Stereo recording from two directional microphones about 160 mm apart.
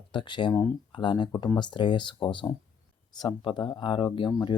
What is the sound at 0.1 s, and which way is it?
Speech, 30° left (ahead or behind).